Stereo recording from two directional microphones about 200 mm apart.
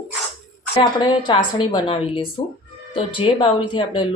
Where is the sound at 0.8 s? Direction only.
25° left (ahead or behind).